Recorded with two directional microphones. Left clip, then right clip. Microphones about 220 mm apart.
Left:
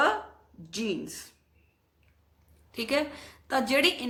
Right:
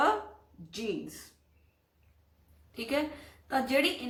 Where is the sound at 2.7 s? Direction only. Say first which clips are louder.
Left 4 dB; 45° left (ahead or behind).